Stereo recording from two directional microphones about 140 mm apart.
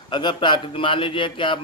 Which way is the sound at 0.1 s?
35° left (ahead or behind).